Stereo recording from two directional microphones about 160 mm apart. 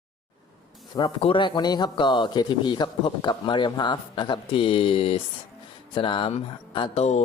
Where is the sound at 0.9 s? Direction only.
30° left (ahead or behind).